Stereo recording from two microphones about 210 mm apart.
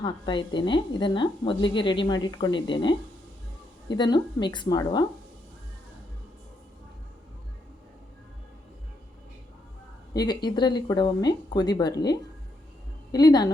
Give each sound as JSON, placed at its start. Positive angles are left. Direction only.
{"t": 0.0, "sound": "a woman's voice", "side_deg": 20}
{"t": 10.2, "sound": "a woman's voice", "side_deg": 20}